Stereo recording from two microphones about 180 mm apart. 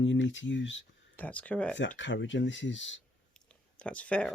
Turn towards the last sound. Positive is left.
turn(degrees=5)  # may be behind; listen again after turning